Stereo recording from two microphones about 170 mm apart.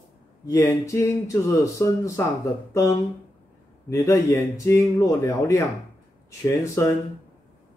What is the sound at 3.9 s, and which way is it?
Speech, 15° left (ahead or behind).